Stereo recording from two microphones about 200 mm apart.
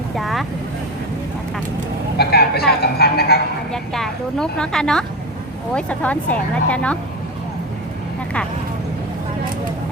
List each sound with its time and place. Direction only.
0.2 s vehicle: centre (ahead or behind)
2.1 s a sound: 55° left (ahead or behind)
3.7 s a woman's voice: 5° left (ahead or behind)